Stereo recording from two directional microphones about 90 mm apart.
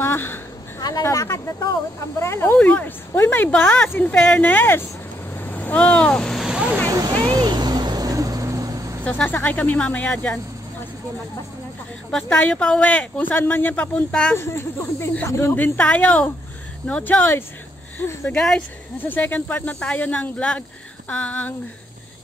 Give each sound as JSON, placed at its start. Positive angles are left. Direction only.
{"t": 0.0, "sound": "a sound", "side_deg": 25}
{"t": 0.7, "sound": "a sound", "side_deg": 50}
{"t": 1.0, "sound": "speech", "side_deg": 40}
{"t": 2.6, "sound": "speech", "side_deg": 20}
{"t": 5.3, "sound": "vehicle", "side_deg": 20}
{"t": 6.4, "sound": "vehicle", "side_deg": -10}
{"t": 6.9, "sound": "a sound", "side_deg": -45}
{"t": 7.2, "sound": "vehicle", "side_deg": -60}
{"t": 9.0, "sound": "speech", "side_deg": 15}
{"t": 12.1, "sound": "speech", "side_deg": 10}
{"t": 14.3, "sound": "speech", "side_deg": 25}
{"t": 15.5, "sound": "speech", "side_deg": 20}
{"t": 18.9, "sound": "speech", "side_deg": 20}